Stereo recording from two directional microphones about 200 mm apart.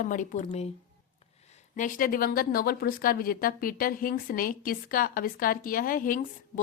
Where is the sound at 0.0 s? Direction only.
40° left (ahead or behind).